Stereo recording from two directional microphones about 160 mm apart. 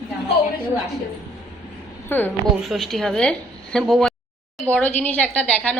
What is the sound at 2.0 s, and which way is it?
Speech, 10° left (ahead or behind).